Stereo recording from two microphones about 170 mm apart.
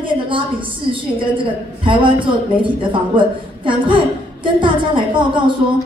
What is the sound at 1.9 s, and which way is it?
A man's voice, 30° right (ahead or behind).